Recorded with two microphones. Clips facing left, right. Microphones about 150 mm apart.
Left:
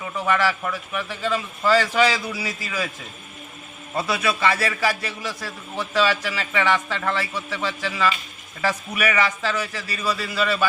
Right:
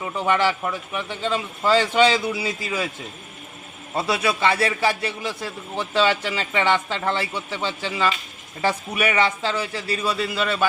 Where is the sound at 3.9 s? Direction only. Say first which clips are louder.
Right 1 dB; 30° right (ahead or behind).